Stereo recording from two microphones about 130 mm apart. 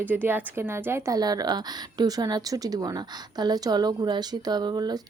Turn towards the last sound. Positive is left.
turn(degrees=-35)  # may be behind; listen again after turning